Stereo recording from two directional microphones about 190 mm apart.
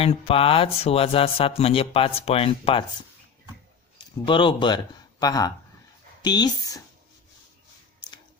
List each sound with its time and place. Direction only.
0.0 s speech: 30° left (ahead or behind)
3.9 s speech: 25° left (ahead or behind)